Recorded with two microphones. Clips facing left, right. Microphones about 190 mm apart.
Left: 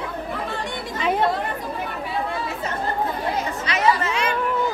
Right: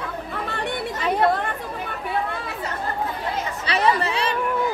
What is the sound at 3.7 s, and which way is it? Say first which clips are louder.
Chatter: right 1 dB; 35° right (ahead or behind).